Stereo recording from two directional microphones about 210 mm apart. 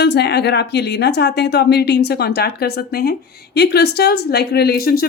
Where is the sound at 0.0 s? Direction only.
50° left (ahead or behind).